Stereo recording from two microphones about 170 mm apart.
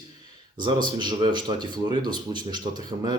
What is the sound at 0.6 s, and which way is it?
Speech, 25° right (ahead or behind).